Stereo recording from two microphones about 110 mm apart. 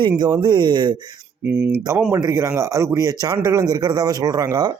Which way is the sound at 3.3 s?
25° right (ahead or behind).